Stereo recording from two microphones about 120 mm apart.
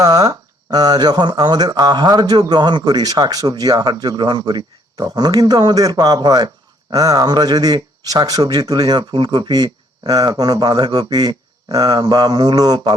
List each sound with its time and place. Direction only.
0.0 s speech: 35° right (ahead or behind)